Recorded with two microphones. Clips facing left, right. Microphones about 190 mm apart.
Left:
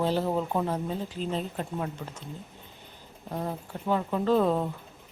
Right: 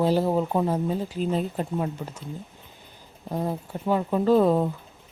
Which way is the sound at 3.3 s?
15° right (ahead or behind).